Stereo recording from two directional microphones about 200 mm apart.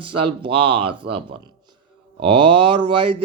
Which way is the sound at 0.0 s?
25° right (ahead or behind).